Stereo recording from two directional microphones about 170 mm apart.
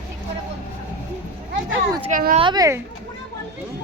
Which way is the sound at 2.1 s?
55° right (ahead or behind).